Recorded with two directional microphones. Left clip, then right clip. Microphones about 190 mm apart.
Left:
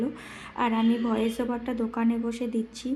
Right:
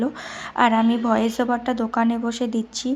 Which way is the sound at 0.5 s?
20° right (ahead or behind).